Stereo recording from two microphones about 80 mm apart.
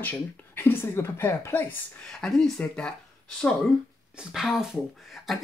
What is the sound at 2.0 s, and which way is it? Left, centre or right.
Speech, centre.